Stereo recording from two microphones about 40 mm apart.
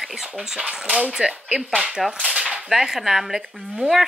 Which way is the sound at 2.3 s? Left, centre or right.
Centre.